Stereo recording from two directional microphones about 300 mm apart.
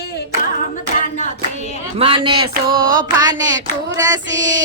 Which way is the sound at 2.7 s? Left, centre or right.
Right.